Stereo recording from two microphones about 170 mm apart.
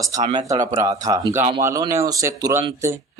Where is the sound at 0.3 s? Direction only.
25° right (ahead or behind).